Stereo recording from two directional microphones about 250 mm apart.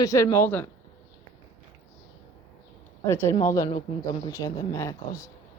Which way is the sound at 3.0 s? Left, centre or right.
Centre.